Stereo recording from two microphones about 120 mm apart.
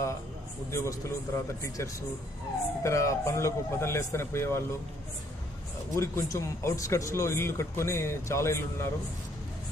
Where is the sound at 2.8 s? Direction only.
25° left (ahead or behind).